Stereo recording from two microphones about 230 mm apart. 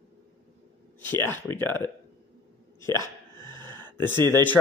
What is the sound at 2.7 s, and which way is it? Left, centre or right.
Hiccup, centre.